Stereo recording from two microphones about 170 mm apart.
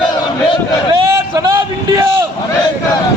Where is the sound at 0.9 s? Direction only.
30° right (ahead or behind).